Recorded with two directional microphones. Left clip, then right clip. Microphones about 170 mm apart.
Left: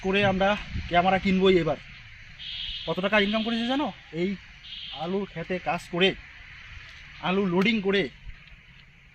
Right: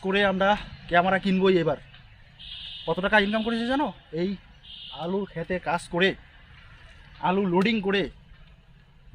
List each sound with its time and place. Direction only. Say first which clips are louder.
0.0 s speech: right 1 dB; 10° right (ahead or behind)
2.8 s speech: right 2 dB; 15° right (ahead or behind)
4.9 s speech: right 2 dB; 10° right (ahead or behind)
7.2 s speech: right 2 dB; 20° right (ahead or behind)